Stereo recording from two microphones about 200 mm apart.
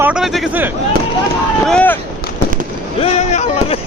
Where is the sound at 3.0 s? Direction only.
35° left (ahead or behind).